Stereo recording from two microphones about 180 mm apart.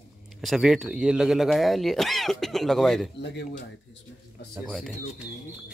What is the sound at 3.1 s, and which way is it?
Speech, 70° left (ahead or behind).